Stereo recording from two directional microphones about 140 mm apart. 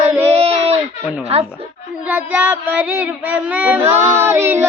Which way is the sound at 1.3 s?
45° right (ahead or behind).